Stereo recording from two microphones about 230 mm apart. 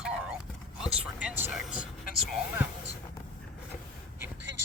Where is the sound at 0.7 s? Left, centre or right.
Centre.